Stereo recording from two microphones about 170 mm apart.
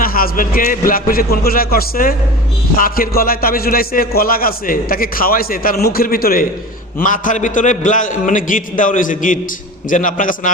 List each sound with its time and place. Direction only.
0.0 s a man's voice: 55° left (ahead or behind)